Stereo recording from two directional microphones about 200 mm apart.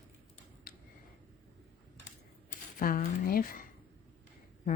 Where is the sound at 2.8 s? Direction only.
45° left (ahead or behind).